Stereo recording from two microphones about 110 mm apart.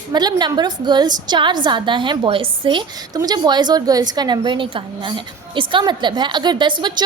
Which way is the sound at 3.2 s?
40° right (ahead or behind).